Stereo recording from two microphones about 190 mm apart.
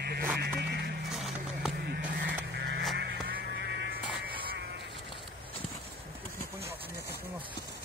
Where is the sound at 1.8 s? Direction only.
60° right (ahead or behind).